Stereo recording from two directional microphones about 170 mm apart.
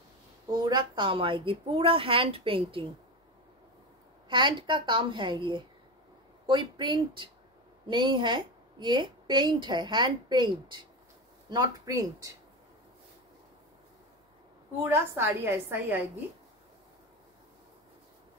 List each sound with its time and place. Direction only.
0.5 s a woman's voice: 25° right (ahead or behind)
4.3 s a woman's voice: 30° right (ahead or behind)
14.8 s a woman's voice: 15° right (ahead or behind)